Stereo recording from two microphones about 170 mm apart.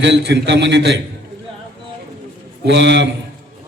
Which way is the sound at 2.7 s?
90° right.